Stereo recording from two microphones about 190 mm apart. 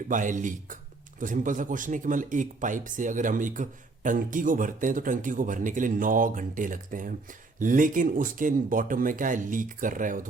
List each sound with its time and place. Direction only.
0.1 s speech: 45° right (ahead or behind)